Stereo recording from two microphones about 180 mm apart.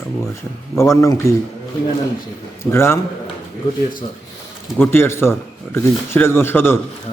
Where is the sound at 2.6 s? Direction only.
15° left (ahead or behind).